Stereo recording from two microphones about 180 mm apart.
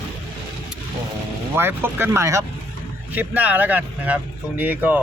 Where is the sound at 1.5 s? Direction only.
10° right (ahead or behind).